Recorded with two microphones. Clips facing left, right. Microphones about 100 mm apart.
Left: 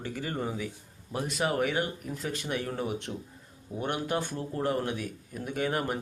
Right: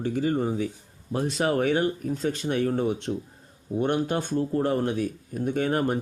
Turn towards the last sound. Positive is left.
turn(degrees=-35)  # may be behind; listen again after turning